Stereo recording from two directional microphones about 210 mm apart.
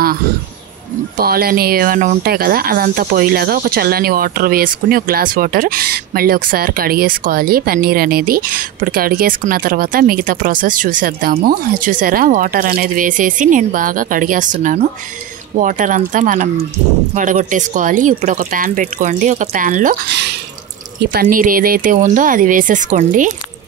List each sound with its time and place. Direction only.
1.1 s speech: 45° right (ahead or behind)
21.0 s speech: 45° right (ahead or behind)